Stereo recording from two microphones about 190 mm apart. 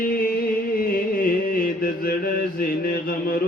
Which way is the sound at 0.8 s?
45° left (ahead or behind).